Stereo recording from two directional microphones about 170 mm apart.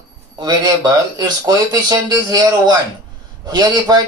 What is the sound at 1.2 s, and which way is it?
Speech, 20° right (ahead or behind).